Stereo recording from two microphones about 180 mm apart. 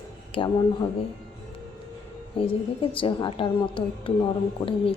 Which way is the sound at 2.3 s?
30° left (ahead or behind).